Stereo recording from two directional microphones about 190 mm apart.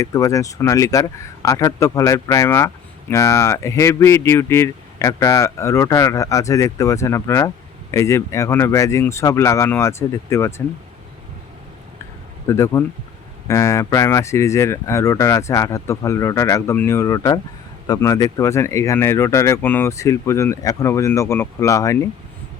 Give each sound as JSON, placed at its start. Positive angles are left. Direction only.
{"t": 0.0, "sound": "speech", "side_deg": 15}
{"t": 12.5, "sound": "speech", "side_deg": 15}